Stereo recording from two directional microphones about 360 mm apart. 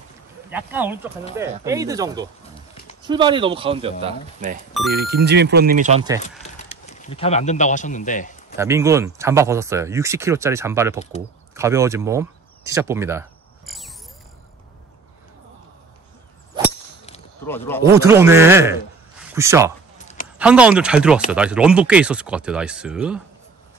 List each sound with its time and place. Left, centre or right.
0.5 s speech: centre
6.2 s speech: centre
8.5 s speech: centre
11.5 s a sound: centre
16.6 s whip: centre
17.5 s speech: centre
17.8 s a man's voice: centre